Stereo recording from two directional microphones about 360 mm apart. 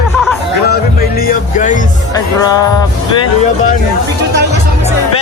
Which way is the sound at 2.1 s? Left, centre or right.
Centre.